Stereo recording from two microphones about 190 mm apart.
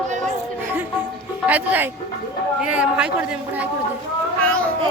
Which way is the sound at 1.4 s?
10° right (ahead or behind).